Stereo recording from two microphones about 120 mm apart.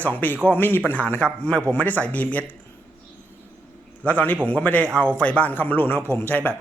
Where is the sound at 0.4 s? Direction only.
15° left (ahead or behind).